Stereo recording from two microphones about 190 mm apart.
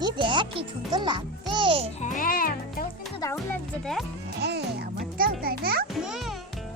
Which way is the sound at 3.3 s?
Centre (ahead or behind).